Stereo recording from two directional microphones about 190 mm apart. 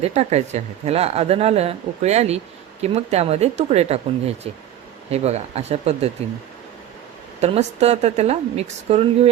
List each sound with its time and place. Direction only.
0.0 s a woman's voice: 35° right (ahead or behind)
7.4 s a woman's voice: 35° right (ahead or behind)